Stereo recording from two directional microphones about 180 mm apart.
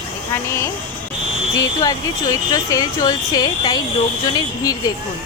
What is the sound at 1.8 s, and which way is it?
Speech, 20° left (ahead or behind).